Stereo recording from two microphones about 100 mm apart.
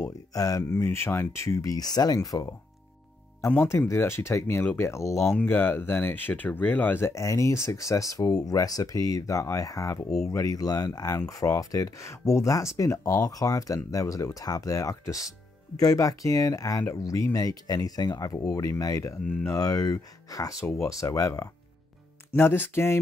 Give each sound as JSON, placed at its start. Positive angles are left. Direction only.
{"t": 0.3, "sound": "speech", "side_deg": 35}
{"t": 3.4, "sound": "speech", "side_deg": 25}
{"t": 5.2, "sound": "speech", "side_deg": 5}
{"t": 5.5, "sound": "speech", "side_deg": 20}